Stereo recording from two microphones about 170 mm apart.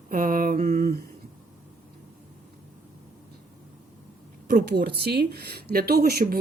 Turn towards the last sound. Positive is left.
turn(degrees=-65)  # may be behind; listen again after turning